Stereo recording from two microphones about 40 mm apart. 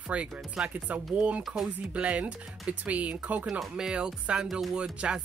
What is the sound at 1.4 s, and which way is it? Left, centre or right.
Speech, centre.